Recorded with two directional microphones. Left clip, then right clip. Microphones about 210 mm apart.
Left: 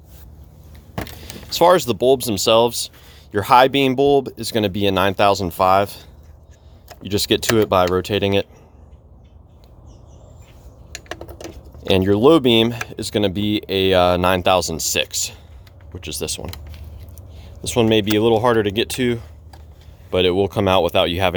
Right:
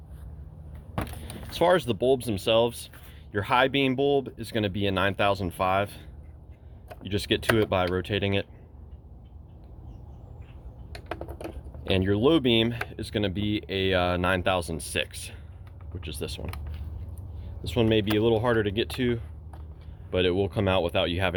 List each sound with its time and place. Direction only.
1.5 s speech: 35° left (ahead or behind)
7.0 s speech: 35° left (ahead or behind)
11.8 s speech: 40° left (ahead or behind)
17.6 s speech: 40° left (ahead or behind)